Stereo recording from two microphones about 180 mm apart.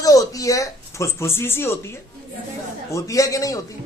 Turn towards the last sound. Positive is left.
turn(degrees=20)  # may be behind; listen again after turning